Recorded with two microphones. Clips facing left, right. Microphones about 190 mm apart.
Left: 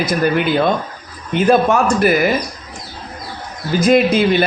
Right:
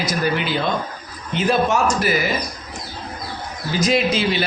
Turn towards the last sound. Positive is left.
turn(degrees=55)  # may be behind; listen again after turning